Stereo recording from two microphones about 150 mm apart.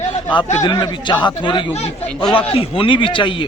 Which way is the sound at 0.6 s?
25° left (ahead or behind).